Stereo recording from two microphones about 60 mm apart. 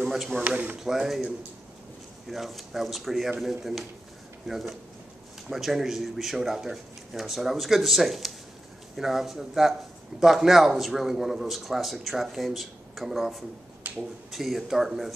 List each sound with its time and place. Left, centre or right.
0.0 s a man's voice: centre
13.9 s a sound: right
14.3 s a man's voice: centre